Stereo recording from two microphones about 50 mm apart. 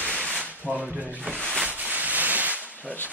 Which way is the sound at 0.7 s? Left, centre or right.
Right.